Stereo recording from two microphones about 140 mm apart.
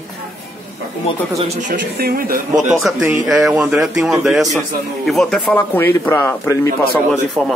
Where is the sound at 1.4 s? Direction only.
55° right (ahead or behind); by 2.7 s 90° right.